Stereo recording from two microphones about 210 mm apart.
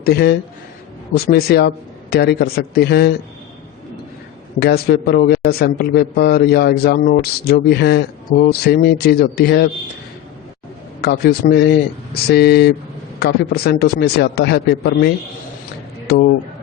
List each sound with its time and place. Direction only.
0.0 s a man's voice: 50° left (ahead or behind)
4.6 s a man's voice: 50° left (ahead or behind)
11.0 s a man's voice: 45° left (ahead or behind)